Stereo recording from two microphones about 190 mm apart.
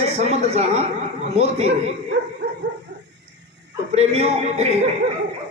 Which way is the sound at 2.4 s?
65° right (ahead or behind).